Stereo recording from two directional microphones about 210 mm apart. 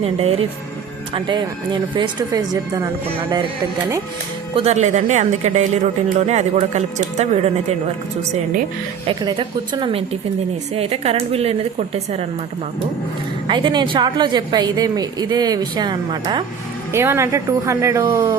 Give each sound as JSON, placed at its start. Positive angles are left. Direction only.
{"t": 0.0, "sound": "a woman's voice", "side_deg": -30}
{"t": 4.5, "sound": "speech", "side_deg": -30}
{"t": 9.0, "sound": "a woman's voice", "side_deg": -20}
{"t": 13.5, "sound": "a woman's voice", "side_deg": -20}